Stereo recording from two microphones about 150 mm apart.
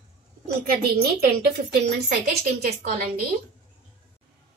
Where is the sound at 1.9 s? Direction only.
90° right.